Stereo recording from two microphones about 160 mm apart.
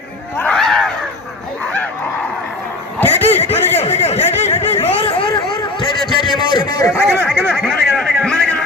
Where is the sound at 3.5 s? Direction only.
15° left (ahead or behind).